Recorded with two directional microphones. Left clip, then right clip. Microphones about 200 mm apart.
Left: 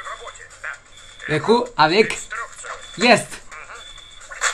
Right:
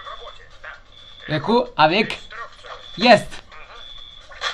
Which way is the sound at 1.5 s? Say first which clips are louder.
Left 1 dB; 10° left (ahead or behind).